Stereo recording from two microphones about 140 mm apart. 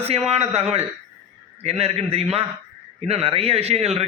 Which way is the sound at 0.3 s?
50° right (ahead or behind).